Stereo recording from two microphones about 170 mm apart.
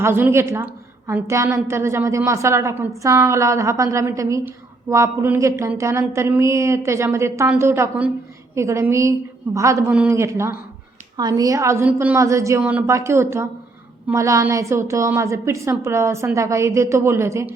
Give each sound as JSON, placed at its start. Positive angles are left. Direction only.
{"t": 0.0, "sound": "a woman's voice", "side_deg": -15}